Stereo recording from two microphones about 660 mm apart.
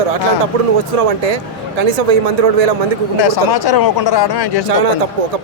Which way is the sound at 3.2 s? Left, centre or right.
Left.